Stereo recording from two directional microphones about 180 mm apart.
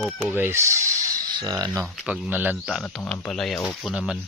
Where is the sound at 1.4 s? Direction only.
20° right (ahead or behind).